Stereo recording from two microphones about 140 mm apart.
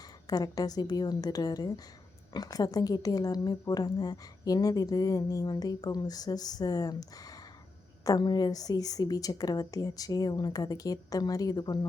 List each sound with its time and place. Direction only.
0.3 s a woman's voice: 25° left (ahead or behind)